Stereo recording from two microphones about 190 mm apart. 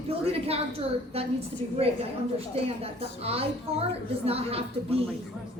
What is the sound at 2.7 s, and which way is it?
A woman's voice, 30° right (ahead or behind).